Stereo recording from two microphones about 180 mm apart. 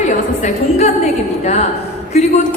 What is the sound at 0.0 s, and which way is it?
A woman's voice, 40° left (ahead or behind).